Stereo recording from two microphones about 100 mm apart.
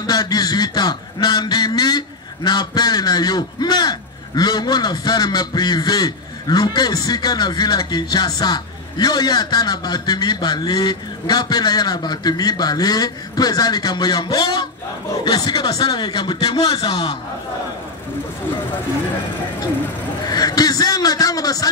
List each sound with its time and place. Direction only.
0.0 s a sound: 45° left (ahead or behind)
4.4 s a man's voice: 45° left (ahead or behind)
20.2 s a man's voice: 40° left (ahead or behind)